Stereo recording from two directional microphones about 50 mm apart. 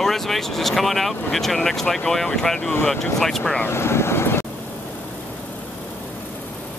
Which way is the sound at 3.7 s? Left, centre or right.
Left.